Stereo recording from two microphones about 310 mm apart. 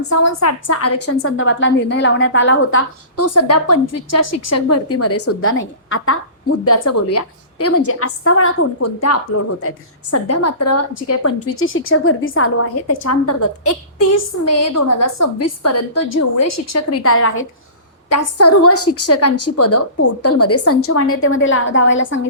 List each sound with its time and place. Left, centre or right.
0.1 s a woman's voice: left
6.7 s a woman's voice: left
12.9 s a woman's voice: left